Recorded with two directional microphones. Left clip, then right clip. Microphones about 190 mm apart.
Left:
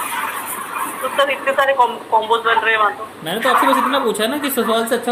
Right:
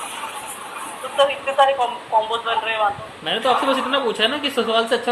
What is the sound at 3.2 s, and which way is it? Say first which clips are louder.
Speech: left 4 dB; 5° left (ahead or behind).